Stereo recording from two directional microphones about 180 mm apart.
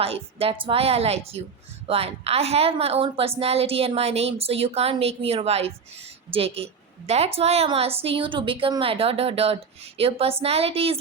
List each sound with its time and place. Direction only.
0.0 s a woman's voice: 35° right (ahead or behind)